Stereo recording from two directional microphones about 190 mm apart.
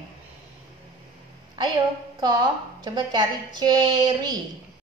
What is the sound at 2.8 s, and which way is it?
A child's voice, 20° right (ahead or behind).